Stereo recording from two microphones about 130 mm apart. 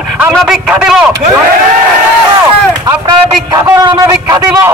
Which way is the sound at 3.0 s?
30° right (ahead or behind).